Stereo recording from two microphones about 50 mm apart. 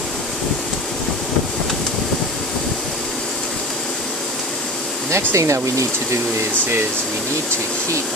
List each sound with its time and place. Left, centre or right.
5.1 s speech: right